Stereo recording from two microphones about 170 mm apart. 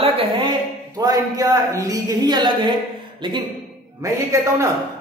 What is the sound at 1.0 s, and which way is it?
A man's voice, 20° right (ahead or behind).